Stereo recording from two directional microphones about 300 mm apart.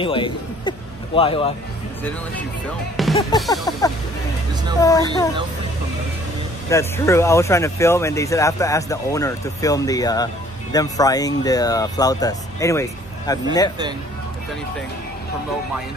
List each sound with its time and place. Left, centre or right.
0.0 s speech: centre
3.2 s speech: centre
4.7 s speech: centre
6.7 s speech: centre